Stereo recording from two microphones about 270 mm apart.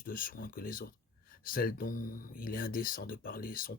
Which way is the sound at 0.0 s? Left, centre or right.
Left.